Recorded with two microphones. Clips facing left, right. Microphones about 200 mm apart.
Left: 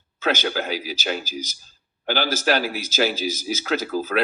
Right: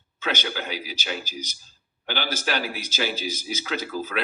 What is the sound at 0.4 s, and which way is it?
Speech, 50° left (ahead or behind).